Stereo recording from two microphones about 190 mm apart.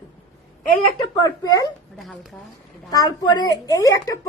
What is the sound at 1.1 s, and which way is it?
Speech, 20° left (ahead or behind).